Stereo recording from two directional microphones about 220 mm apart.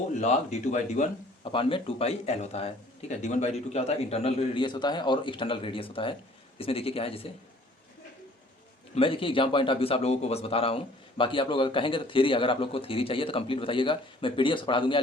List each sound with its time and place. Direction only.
0.1 s a man's voice: 30° left (ahead or behind)
9.0 s a man's voice: 25° left (ahead or behind)